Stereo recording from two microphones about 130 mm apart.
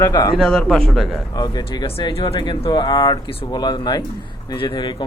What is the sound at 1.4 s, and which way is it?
Speech, 35° left (ahead or behind).